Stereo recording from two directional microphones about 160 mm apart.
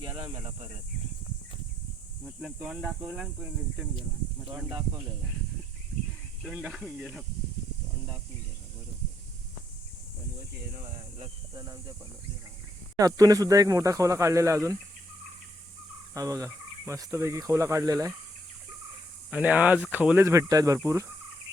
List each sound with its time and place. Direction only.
2.2 s speech: centre (ahead or behind)
6.4 s speech: 5° right (ahead or behind)
11.5 s speech: 25° right (ahead or behind)
13.0 s speech: 20° right (ahead or behind)
16.1 s speech: 20° right (ahead or behind)
19.3 s speech: 10° right (ahead or behind)